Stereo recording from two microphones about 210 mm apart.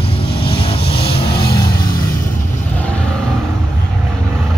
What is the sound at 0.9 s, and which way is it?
Music, 50° left (ahead or behind).